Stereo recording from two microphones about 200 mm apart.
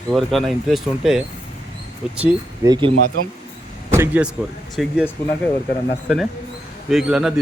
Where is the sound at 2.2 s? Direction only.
15° right (ahead or behind).